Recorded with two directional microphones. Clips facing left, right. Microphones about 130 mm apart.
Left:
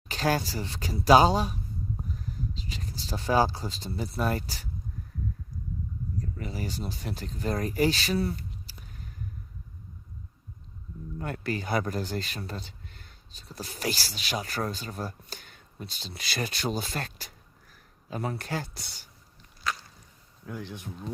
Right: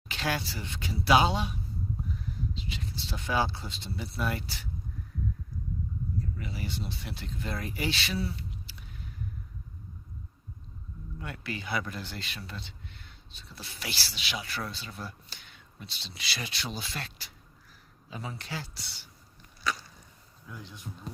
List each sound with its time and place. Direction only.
0.1 s speech: 40° left (ahead or behind)
6.1 s speech: 40° left (ahead or behind)
11.2 s speech: 45° left (ahead or behind)
20.5 s speech: 65° left (ahead or behind)